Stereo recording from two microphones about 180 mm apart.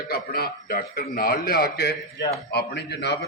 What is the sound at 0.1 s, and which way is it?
A man's voice, 55° left (ahead or behind).